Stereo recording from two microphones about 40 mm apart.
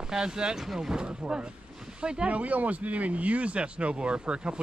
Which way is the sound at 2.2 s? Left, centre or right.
Right.